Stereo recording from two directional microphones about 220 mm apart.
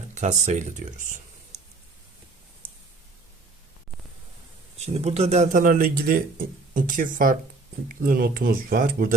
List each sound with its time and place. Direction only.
0.1 s speech: 35° right (ahead or behind)
4.8 s speech: 30° right (ahead or behind)